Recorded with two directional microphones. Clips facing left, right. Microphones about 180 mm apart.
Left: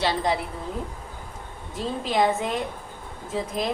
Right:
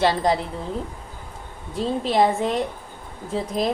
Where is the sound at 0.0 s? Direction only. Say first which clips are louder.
Right 4 dB; 40° right (ahead or behind).